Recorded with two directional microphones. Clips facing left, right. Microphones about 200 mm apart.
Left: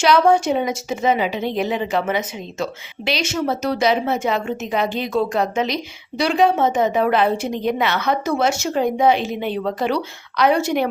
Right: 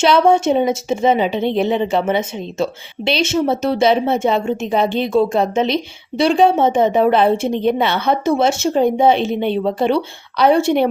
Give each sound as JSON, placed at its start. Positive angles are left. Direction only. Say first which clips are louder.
{"t": 0.0, "sound": "speech", "louder": "right 2 dB", "side_deg": -25}